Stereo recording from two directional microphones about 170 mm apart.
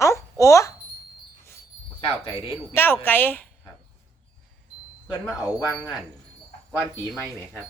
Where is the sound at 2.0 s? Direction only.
30° left (ahead or behind).